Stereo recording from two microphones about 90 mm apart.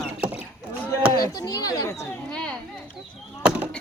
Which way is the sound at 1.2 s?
45° left (ahead or behind).